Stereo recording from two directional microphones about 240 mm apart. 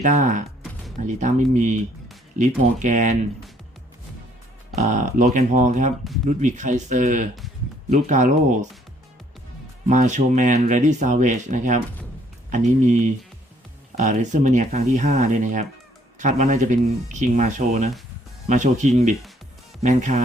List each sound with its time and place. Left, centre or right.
0.0 s speech: right
4.7 s speech: right
9.8 s speech: right